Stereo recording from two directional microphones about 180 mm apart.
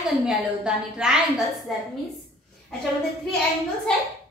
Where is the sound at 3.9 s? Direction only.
5° left (ahead or behind).